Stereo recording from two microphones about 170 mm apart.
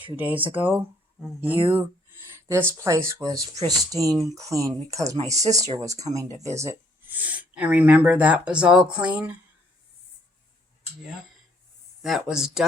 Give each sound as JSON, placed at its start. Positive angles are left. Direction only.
{"t": 0.2, "sound": "speech", "side_deg": -10}
{"t": 12.0, "sound": "speech", "side_deg": 0}